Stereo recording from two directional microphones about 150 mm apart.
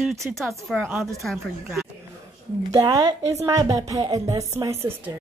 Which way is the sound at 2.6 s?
25° right (ahead or behind).